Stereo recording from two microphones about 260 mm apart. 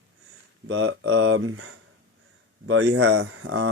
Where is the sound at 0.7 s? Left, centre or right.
Right.